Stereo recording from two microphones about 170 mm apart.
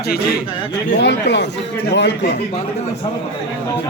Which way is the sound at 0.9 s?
90° left.